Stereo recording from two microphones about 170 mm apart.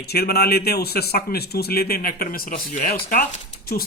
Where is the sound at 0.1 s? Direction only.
65° left (ahead or behind).